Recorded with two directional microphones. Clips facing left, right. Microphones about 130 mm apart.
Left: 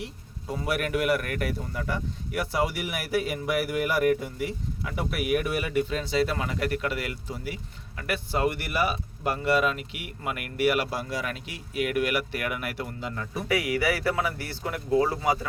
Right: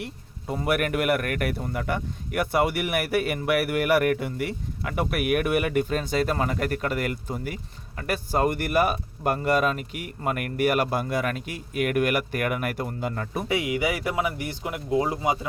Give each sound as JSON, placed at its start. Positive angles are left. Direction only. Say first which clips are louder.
{"t": 0.6, "sound": "speech", "louder": "right 3 dB", "side_deg": -55}
{"t": 13.5, "sound": "speech", "louder": "even", "side_deg": -20}